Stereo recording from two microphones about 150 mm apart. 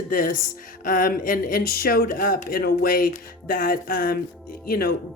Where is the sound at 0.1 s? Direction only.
65° left (ahead or behind).